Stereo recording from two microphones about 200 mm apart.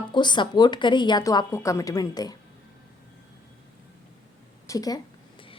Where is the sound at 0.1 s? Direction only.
25° left (ahead or behind).